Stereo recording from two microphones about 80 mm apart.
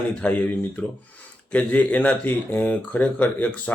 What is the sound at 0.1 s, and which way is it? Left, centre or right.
Speech, centre.